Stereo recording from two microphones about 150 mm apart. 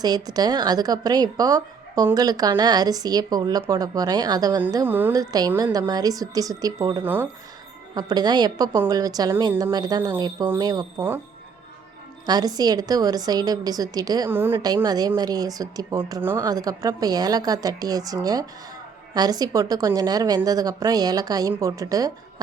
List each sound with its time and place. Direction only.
0.0 s speech: 25° right (ahead or behind)
4.7 s a woman's voice: 15° right (ahead or behind)
5.1 s speech: 25° right (ahead or behind)
7.0 s a woman's voice: 15° right (ahead or behind)
7.9 s speech: 30° right (ahead or behind)
10.9 s a woman's voice: 15° right (ahead or behind)
12.2 s speech: 25° right (ahead or behind)
14.3 s a woman's voice: 15° right (ahead or behind)
14.8 s speech: 25° right (ahead or behind)